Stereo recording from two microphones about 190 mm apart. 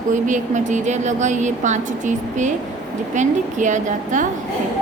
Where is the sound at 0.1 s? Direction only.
40° right (ahead or behind).